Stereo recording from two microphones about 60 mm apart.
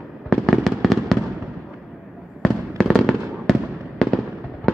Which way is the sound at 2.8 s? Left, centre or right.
Centre.